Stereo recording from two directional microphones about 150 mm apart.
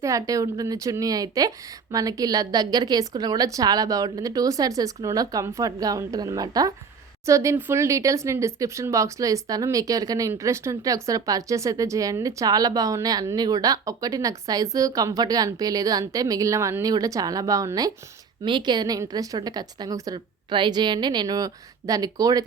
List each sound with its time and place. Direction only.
0.0 s speech: 20° right (ahead or behind)